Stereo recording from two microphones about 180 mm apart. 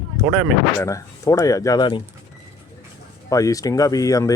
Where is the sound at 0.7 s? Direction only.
15° left (ahead or behind).